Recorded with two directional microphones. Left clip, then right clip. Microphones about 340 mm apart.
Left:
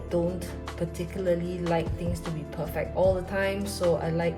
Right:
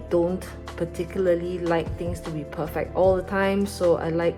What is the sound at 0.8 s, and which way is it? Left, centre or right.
Speech, centre.